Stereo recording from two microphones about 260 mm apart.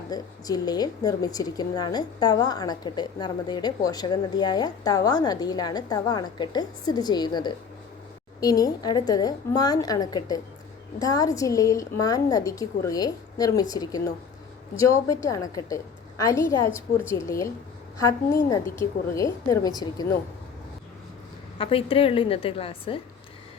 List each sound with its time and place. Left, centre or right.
0.1 s a woman's voice: centre
21.6 s a woman's voice: left